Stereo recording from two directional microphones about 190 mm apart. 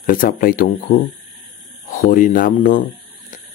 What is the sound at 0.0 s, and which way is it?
Speech, 50° left (ahead or behind).